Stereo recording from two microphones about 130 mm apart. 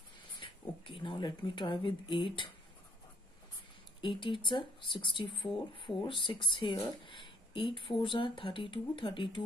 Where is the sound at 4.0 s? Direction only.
40° left (ahead or behind).